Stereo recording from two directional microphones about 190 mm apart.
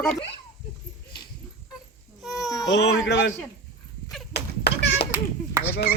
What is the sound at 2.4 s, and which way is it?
Baby cry, 20° left (ahead or behind).